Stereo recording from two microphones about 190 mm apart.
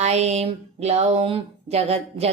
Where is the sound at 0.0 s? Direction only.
35° right (ahead or behind).